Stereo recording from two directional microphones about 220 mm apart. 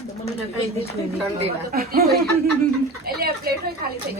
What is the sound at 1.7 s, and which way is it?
Speech, 45° right (ahead or behind).